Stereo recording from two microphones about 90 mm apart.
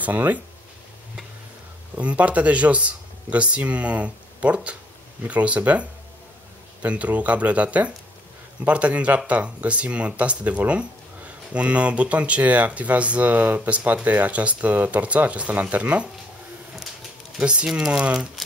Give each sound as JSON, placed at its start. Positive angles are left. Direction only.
{"t": 0.0, "sound": "speech", "side_deg": -20}
{"t": 2.0, "sound": "speech", "side_deg": -15}
{"t": 17.4, "sound": "speech", "side_deg": -15}